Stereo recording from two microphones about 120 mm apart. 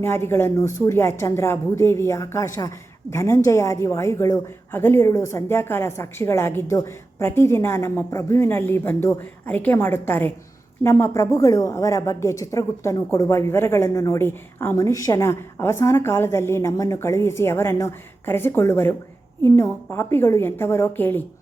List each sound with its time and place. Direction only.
0.0 s a woman's voice: 20° left (ahead or behind)